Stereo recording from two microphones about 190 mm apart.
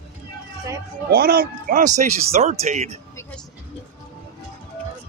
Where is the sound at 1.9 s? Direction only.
35° right (ahead or behind).